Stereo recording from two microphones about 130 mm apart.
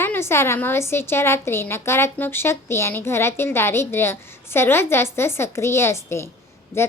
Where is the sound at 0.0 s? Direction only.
20° left (ahead or behind).